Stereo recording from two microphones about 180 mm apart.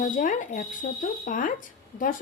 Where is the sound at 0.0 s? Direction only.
45° left (ahead or behind).